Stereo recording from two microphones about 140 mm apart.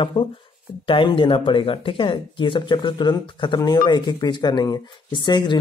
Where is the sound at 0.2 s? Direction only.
40° left (ahead or behind).